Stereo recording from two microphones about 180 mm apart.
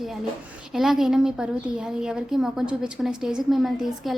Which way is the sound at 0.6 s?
Centre (ahead or behind).